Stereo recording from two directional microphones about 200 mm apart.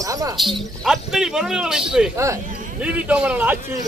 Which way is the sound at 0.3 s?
Centre (ahead or behind).